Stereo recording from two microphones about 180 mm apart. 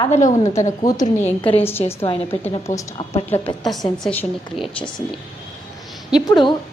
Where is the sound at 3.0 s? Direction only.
35° left (ahead or behind).